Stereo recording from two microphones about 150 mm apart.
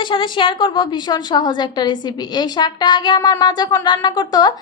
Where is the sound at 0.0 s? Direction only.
35° left (ahead or behind).